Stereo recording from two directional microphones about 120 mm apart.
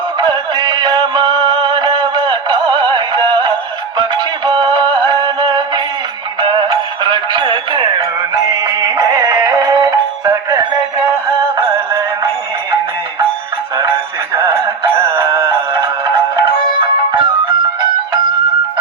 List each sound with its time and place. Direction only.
0.2 s music: 40° right (ahead or behind)
11.6 s synthetic singing: 45° right (ahead or behind)
14.3 s a sound: 45° right (ahead or behind)
14.9 s music: 15° right (ahead or behind)
15.3 s music: 45° right (ahead or behind)